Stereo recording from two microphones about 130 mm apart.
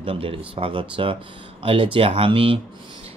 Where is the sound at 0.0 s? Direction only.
45° right (ahead or behind).